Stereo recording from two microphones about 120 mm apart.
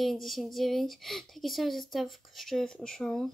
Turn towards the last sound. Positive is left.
turn(degrees=5)  # may be behind; listen again after turning